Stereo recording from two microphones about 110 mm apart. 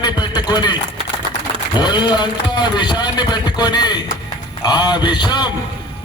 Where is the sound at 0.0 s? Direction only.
40° left (ahead or behind).